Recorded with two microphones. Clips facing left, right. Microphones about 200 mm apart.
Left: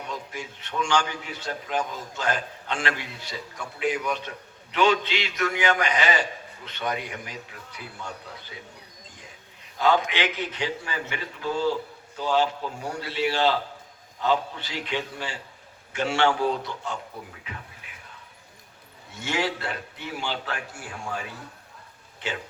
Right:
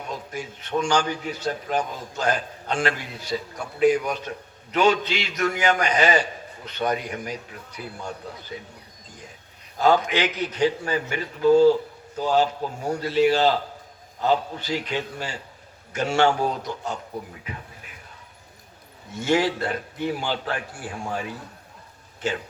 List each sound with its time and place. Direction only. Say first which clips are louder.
0.3 s a man's voice: right 6 dB; 40° right (ahead or behind)
9.7 s a man's voice: right 3 dB; 40° right (ahead or behind)
19.2 s a man's voice: right 6 dB; 40° right (ahead or behind)
22.2 s a man's voice: right 6 dB; 45° right (ahead or behind)